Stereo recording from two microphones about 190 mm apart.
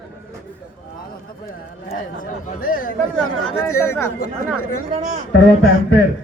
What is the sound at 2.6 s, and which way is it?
Speech, 45° left (ahead or behind).